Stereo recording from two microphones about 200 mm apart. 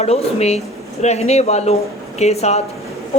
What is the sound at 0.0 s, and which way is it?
Speech, 30° left (ahead or behind).